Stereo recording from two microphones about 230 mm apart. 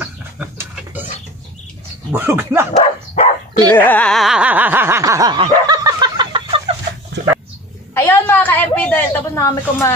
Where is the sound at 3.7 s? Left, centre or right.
Centre.